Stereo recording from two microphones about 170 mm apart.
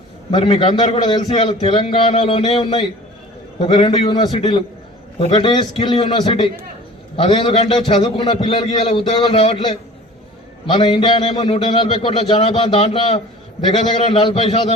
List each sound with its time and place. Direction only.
0.3 s a man's voice: 30° left (ahead or behind)